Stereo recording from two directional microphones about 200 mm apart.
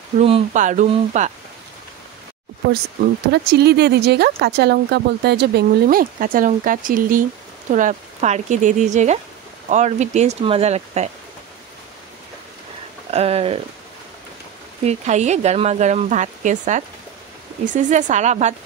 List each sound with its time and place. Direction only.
0.2 s speech: 35° right (ahead or behind)
3.4 s speech: 55° right (ahead or behind); by 11.1 s 30° right (ahead or behind)
13.1 s speech: 30° right (ahead or behind)
14.8 s speech: 35° right (ahead or behind)